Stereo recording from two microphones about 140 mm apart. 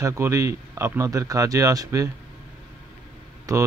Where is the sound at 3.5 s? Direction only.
25° right (ahead or behind).